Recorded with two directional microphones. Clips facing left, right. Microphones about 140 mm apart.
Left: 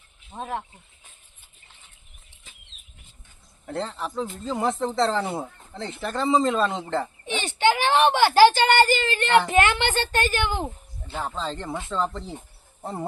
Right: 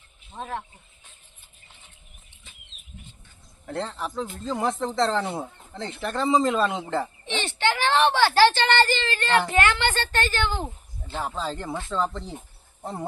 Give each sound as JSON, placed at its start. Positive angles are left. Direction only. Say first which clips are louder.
{"t": 0.3, "sound": "a woman's voice", "louder": "left 2 dB", "side_deg": 15}
{"t": 3.7, "sound": "speech", "louder": "left 1 dB", "side_deg": 0}
{"t": 7.3, "sound": "a woman's voice", "louder": "left 6 dB", "side_deg": 10}
{"t": 11.0, "sound": "speech", "louder": "even", "side_deg": -5}